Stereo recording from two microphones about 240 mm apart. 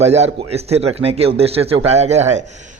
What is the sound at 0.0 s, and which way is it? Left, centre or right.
A man's voice, right.